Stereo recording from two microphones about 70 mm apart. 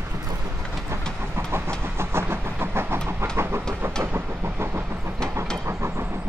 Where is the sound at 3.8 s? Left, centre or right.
Right.